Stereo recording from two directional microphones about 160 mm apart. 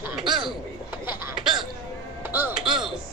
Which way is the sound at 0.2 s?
30° right (ahead or behind).